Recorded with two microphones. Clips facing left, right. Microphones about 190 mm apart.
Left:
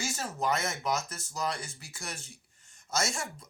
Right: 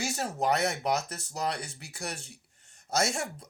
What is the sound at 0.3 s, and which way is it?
Speech, 65° right (ahead or behind).